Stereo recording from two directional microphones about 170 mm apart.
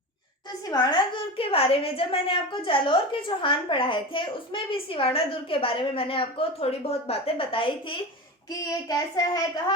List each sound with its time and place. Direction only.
0.7 s a woman's voice: 25° left (ahead or behind)
8.5 s a child's voice: 20° left (ahead or behind)